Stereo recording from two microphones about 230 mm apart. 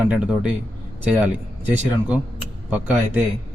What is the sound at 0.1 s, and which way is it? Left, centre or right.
Speech, centre.